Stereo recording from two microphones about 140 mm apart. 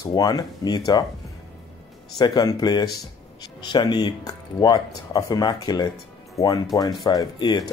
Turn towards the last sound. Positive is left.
turn(degrees=30)  # may be behind; listen again after turning